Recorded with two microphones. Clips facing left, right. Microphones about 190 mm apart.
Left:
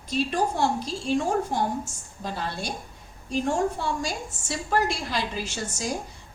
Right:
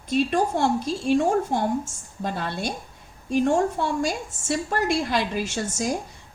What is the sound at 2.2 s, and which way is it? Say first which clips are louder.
A woman's voice: right 3 dB; 55° right (ahead or behind).